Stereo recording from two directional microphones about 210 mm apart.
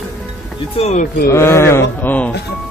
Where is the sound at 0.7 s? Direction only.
30° left (ahead or behind).